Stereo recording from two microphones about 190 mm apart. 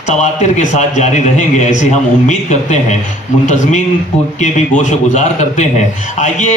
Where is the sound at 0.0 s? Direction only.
40° left (ahead or behind).